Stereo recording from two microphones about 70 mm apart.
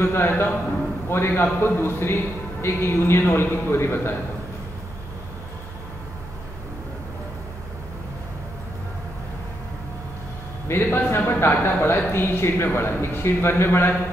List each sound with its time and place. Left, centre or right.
0.0 s a man's voice: left
10.7 s a man's voice: left